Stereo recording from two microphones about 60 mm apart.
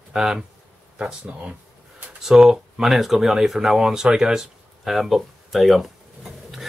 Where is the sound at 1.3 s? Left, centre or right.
Right.